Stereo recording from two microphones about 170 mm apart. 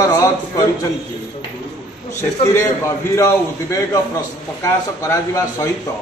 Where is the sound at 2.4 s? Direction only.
15° left (ahead or behind).